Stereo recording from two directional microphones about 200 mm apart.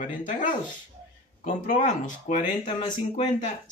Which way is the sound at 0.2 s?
40° left (ahead or behind).